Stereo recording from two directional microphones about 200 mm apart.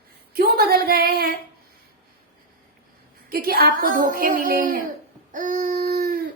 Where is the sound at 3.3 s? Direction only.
50° right (ahead or behind).